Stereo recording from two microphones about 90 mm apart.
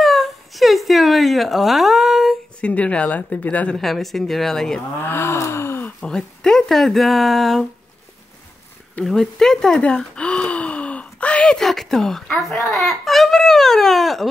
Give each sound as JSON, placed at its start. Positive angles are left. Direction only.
{"t": 0.0, "sound": "a sound", "side_deg": 0}
{"t": 2.6, "sound": "speech", "side_deg": 15}
{"t": 3.8, "sound": "speech", "side_deg": 0}
{"t": 5.0, "sound": "groan", "side_deg": 25}
{"t": 5.9, "sound": "speech", "side_deg": 5}
{"t": 9.0, "sound": "gasp", "side_deg": 5}
{"t": 12.4, "sound": "baby cry", "side_deg": 0}